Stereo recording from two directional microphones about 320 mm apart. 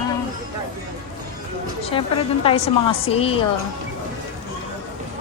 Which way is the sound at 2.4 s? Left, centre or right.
Centre.